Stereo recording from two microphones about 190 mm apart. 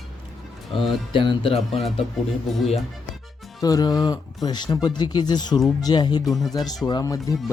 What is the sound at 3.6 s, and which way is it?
Speech, 20° left (ahead or behind).